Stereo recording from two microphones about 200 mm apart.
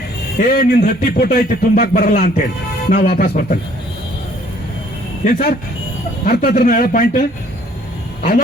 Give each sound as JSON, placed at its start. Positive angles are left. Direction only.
{"t": 0.3, "sound": "speech", "side_deg": 50}
{"t": 5.2, "sound": "speech", "side_deg": 40}